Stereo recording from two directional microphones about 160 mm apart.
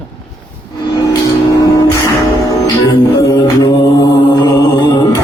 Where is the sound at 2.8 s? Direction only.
20° left (ahead or behind).